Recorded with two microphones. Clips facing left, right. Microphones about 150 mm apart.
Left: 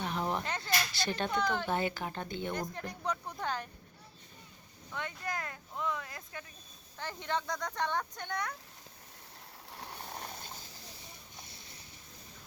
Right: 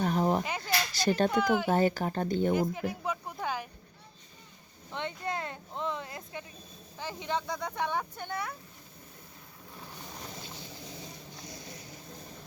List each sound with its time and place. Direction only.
0.0 s a sound: 40° right (ahead or behind)
0.6 s speech: 40° right (ahead or behind)
1.3 s speech: 10° right (ahead or behind)
1.7 s speech: 40° right (ahead or behind)
2.5 s speech: 5° right (ahead or behind)
4.9 s speech: 25° right (ahead or behind)
7.0 s speech: 15° right (ahead or behind)